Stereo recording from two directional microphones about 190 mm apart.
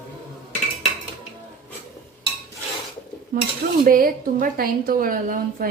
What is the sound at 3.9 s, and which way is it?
A woman's voice, 50° right (ahead or behind).